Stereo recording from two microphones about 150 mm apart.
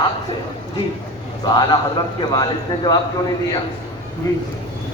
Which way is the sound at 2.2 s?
25° left (ahead or behind).